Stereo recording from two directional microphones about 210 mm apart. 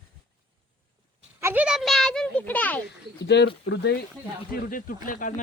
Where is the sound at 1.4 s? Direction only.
10° right (ahead or behind); by 2.8 s 10° left (ahead or behind).